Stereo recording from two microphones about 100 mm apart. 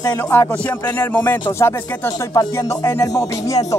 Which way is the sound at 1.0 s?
20° left (ahead or behind).